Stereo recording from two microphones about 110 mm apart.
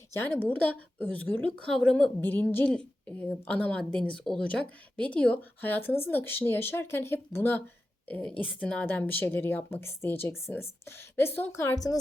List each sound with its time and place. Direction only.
0.1 s a woman's voice: 20° left (ahead or behind)
2.2 s a woman's voice: 20° left (ahead or behind)
8.0 s speech: 10° left (ahead or behind); by 11.9 s 30° left (ahead or behind)